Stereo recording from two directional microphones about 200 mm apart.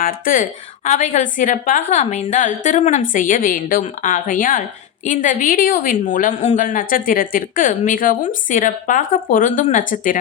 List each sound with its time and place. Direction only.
0.0 s a woman's voice: 45° left (ahead or behind)